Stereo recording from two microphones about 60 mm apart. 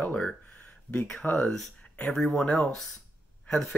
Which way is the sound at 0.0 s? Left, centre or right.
Left.